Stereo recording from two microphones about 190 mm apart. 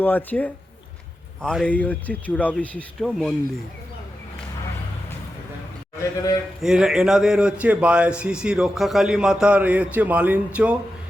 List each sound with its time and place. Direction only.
0.0 s speech: 10° left (ahead or behind)
6.0 s speech: 20° left (ahead or behind)
6.6 s speech: centre (ahead or behind)